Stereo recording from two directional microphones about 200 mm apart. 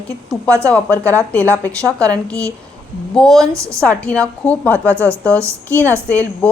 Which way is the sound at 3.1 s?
5° left (ahead or behind).